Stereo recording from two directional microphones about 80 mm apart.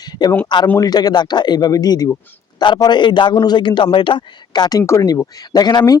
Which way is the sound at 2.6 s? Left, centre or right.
Left.